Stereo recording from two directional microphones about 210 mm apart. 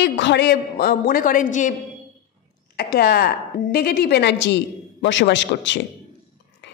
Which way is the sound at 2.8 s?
50° left (ahead or behind).